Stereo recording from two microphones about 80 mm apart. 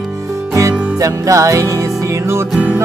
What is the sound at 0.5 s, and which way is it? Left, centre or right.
Music, right.